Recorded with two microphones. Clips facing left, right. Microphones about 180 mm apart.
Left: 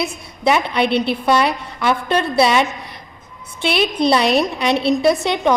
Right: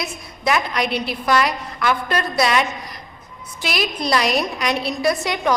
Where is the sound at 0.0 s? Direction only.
30° left (ahead or behind).